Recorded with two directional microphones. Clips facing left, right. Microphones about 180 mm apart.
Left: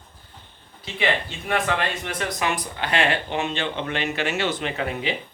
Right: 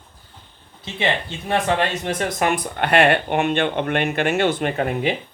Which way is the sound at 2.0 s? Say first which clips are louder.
Right 5 dB; 45° right (ahead or behind).